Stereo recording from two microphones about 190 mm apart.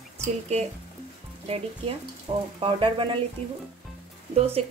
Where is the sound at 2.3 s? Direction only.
30° right (ahead or behind).